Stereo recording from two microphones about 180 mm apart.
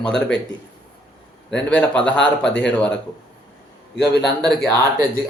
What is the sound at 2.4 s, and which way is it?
Speech, 75° left (ahead or behind).